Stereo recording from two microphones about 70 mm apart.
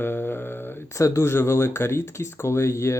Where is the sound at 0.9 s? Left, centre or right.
Left.